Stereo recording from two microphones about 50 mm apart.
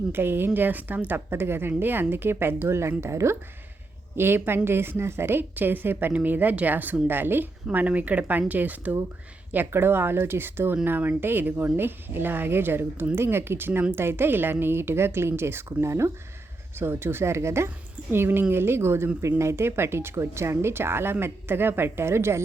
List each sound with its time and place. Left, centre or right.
0.1 s a woman's voice: right
1.3 s speech: right
4.2 s a woman's voice: right
9.5 s speech: right
15.9 s speech: right
16.7 s speech: right
18.1 s speech: right